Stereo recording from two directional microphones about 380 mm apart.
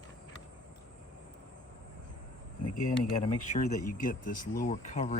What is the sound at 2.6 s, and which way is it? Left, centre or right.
Speech, left.